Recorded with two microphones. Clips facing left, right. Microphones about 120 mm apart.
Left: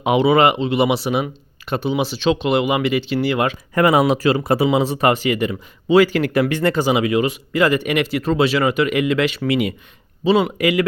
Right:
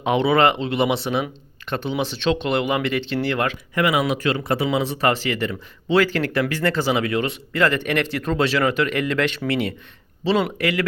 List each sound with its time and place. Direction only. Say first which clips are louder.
0.0 s speech: left 3 dB; 5° left (ahead or behind)
3.8 s speech: left 5 dB; 40° left (ahead or behind)
4.0 s speech: left 5 dB; 30° left (ahead or behind); by 10.7 s 10° left (ahead or behind)